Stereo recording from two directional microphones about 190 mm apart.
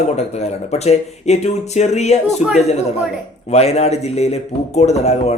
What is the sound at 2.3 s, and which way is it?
Speech, centre (ahead or behind).